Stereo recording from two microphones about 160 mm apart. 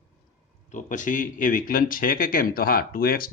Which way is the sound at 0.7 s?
50° left (ahead or behind).